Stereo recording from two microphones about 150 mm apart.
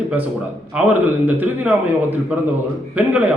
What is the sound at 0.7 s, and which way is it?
A man's voice, 10° right (ahead or behind).